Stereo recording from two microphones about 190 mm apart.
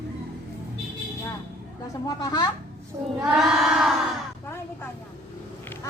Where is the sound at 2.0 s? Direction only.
20° left (ahead or behind).